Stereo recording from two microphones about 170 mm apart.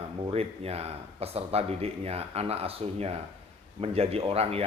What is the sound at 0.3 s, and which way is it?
Speech, 35° right (ahead or behind).